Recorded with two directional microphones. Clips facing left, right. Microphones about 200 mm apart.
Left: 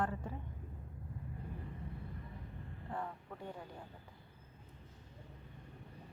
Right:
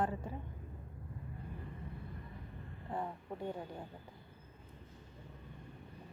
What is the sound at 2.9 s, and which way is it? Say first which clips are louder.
Speech: right 3 dB; 20° right (ahead or behind).